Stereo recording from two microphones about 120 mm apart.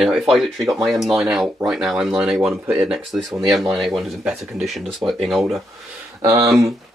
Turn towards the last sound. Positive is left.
turn(degrees=-25)  # may be behind; listen again after turning